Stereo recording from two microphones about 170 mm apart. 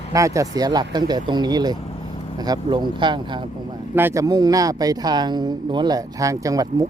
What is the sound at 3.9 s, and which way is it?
Speech, 15° right (ahead or behind).